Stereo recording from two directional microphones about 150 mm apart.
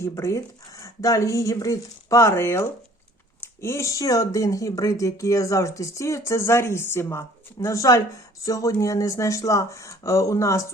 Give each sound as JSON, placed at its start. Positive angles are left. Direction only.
{"t": 0.0, "sound": "speech", "side_deg": 20}